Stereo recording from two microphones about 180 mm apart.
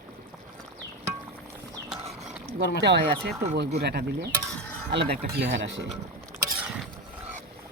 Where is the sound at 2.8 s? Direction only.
70° right (ahead or behind).